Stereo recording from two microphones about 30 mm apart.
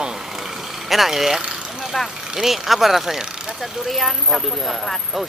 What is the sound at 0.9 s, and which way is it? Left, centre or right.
Speech, centre.